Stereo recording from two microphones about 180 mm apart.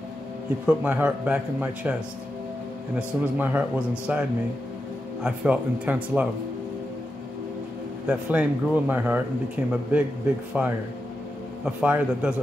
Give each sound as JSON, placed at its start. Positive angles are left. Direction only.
{"t": 0.7, "sound": "a man's voice", "side_deg": -10}
{"t": 3.0, "sound": "a man's voice", "side_deg": -10}
{"t": 8.1, "sound": "a man's voice", "side_deg": -10}